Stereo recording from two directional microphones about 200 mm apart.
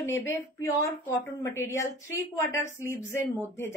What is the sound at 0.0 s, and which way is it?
Speech, 15° left (ahead or behind).